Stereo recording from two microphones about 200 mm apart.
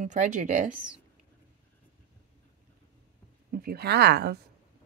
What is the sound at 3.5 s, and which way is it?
Speech, 50° right (ahead or behind).